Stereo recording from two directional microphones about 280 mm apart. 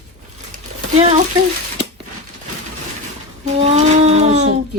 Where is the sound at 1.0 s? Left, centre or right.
Right.